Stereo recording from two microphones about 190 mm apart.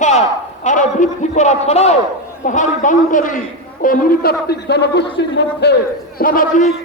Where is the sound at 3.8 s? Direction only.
55° left (ahead or behind).